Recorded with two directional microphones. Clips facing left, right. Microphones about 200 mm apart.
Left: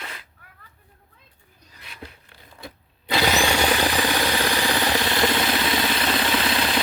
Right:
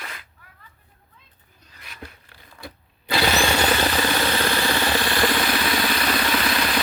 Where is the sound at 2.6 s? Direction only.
20° left (ahead or behind).